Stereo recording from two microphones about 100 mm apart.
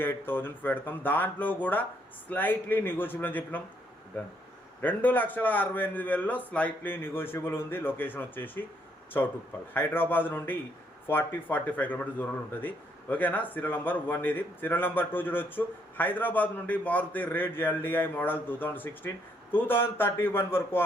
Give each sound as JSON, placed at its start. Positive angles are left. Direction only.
{"t": 0.0, "sound": "speech", "side_deg": 20}
{"t": 9.7, "sound": "speech", "side_deg": 20}